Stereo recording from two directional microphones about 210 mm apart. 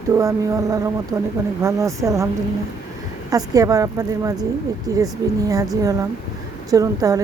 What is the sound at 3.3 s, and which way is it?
Speech, 15° right (ahead or behind).